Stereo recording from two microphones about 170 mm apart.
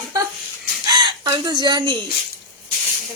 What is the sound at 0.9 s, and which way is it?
Speech, 25° right (ahead or behind).